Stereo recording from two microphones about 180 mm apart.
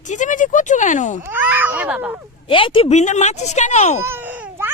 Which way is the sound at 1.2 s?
10° right (ahead or behind).